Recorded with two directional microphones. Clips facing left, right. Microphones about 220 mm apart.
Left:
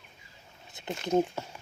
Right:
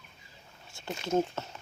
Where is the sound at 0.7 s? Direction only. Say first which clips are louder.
Left 2 dB; 20° left (ahead or behind).